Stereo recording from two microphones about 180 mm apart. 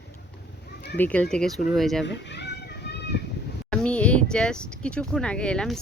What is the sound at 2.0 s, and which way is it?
Children playing, 70° left (ahead or behind).